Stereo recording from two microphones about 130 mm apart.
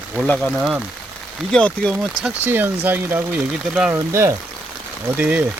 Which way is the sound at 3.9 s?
20° right (ahead or behind).